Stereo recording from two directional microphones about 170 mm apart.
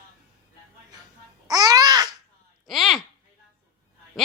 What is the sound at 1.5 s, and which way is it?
Babbling, 25° right (ahead or behind).